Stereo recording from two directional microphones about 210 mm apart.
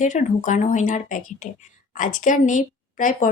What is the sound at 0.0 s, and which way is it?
A woman's voice, 35° left (ahead or behind).